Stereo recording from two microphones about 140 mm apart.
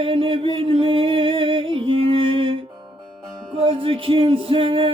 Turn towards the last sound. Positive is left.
turn(degrees=-40)  # may be behind; listen again after turning